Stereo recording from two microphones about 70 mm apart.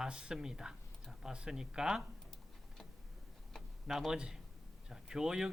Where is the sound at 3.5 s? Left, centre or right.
Centre.